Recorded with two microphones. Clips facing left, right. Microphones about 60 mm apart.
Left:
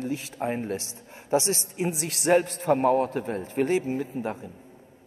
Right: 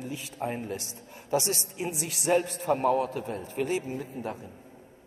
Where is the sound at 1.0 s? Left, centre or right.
Left.